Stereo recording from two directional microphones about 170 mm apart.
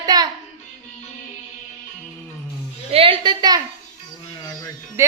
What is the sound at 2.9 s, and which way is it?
Speech, 35° right (ahead or behind).